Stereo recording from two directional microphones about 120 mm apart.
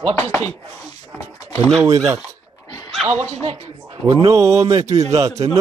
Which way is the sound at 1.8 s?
25° right (ahead or behind).